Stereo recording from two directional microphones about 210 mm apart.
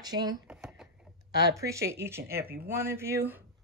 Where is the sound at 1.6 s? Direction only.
15° right (ahead or behind).